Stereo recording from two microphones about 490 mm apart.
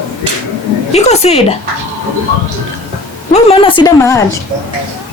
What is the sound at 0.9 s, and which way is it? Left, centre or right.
Speech, centre.